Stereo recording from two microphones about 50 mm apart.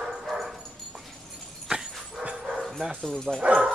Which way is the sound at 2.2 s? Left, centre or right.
Centre.